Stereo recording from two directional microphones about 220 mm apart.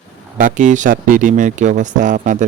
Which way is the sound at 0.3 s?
35° right (ahead or behind).